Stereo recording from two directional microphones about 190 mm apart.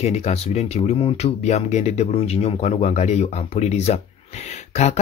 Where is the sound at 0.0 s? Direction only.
35° left (ahead or behind).